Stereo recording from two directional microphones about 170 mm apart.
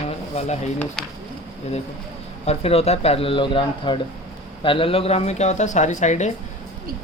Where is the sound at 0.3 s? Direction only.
40° left (ahead or behind).